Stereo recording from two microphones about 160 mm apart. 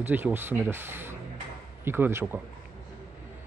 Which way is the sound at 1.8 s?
15° right (ahead or behind).